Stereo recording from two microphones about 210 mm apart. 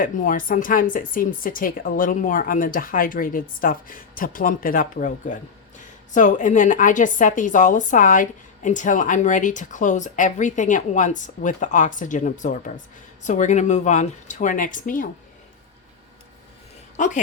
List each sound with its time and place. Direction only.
0.0 s a woman's voice: 40° left (ahead or behind)